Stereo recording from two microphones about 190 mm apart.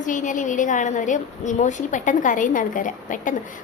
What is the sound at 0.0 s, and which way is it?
A woman's voice, 40° left (ahead or behind).